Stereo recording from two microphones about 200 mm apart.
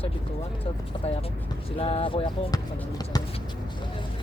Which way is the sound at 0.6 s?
30° left (ahead or behind).